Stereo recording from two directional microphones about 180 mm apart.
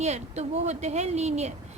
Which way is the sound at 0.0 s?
40° right (ahead or behind).